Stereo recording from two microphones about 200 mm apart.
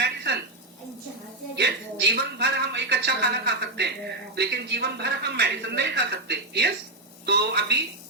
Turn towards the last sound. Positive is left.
turn(degrees=-55)  # may be behind; listen again after turning